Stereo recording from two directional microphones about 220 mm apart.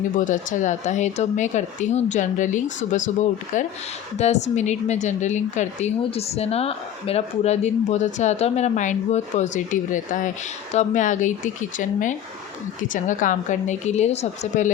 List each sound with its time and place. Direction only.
0.3 s a woman's voice: 35° left (ahead or behind)
4.2 s a woman's voice: 30° left (ahead or behind)